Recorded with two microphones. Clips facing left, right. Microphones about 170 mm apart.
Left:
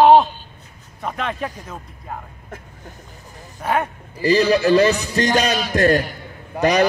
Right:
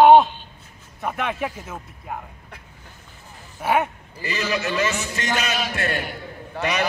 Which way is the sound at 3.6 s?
10° right (ahead or behind).